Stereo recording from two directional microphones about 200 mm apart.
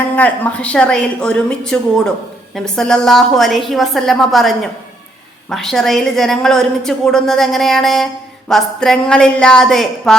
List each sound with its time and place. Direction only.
0.2 s a woman's voice: 5° left (ahead or behind)